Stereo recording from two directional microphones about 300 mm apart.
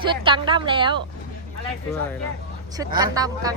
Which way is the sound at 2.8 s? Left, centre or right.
Centre.